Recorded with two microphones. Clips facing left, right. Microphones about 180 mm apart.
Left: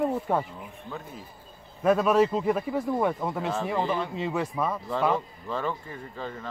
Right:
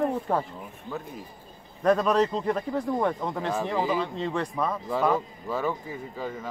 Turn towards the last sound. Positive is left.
turn(degrees=-5)  # may be behind; listen again after turning